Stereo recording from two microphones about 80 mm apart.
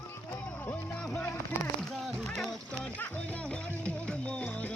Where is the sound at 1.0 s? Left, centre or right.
Centre.